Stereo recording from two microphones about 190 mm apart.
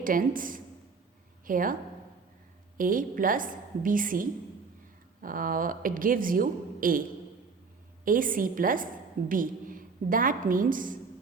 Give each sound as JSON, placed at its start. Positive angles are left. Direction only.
{"t": 0.0, "sound": "a woman's voice", "side_deg": -45}
{"t": 2.7, "sound": "a woman's voice", "side_deg": -45}
{"t": 8.0, "sound": "a woman's voice", "side_deg": -45}